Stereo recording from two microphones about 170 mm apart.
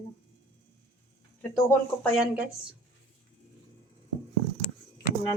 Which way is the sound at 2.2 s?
5° right (ahead or behind).